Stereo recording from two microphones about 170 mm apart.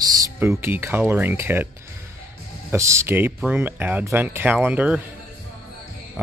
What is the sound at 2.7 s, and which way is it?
Speech, 15° right (ahead or behind).